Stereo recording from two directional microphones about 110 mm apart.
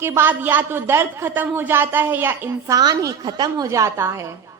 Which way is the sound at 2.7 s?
35° right (ahead or behind).